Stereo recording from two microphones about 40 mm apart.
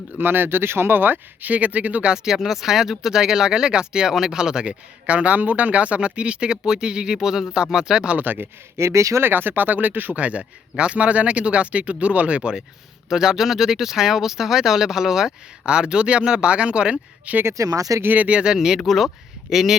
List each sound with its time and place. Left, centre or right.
0.2 s speech: right
2.1 s speech: centre
5.0 s speech: right
8.2 s speech: right
10.2 s speech: right
13.1 s speech: centre
17.3 s speech: right
18.0 s speech: right
18.3 s speech: right
18.5 s speech: centre